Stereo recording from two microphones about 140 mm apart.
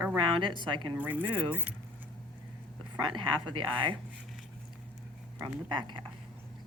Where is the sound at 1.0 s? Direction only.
10° right (ahead or behind).